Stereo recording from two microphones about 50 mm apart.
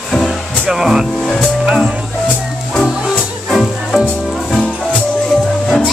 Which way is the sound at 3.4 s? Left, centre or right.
Centre.